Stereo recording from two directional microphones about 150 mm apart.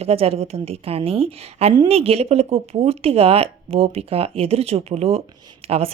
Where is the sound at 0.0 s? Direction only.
40° right (ahead or behind).